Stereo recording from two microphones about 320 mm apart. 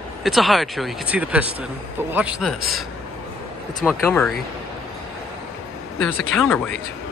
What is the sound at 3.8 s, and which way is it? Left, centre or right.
Speech, centre.